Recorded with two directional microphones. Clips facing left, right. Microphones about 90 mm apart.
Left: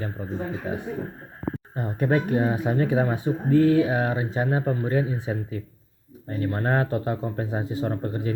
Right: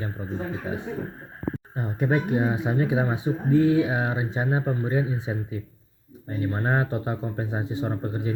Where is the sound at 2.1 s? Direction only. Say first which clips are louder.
Left 1 dB; 15° right (ahead or behind).